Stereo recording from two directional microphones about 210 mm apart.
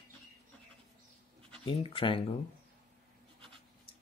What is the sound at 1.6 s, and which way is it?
Speech, 25° left (ahead or behind).